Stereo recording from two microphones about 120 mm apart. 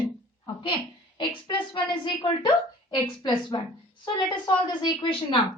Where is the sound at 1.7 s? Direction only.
40° left (ahead or behind).